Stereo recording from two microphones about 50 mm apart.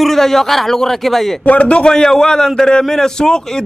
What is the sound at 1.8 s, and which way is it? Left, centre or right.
Speech, centre.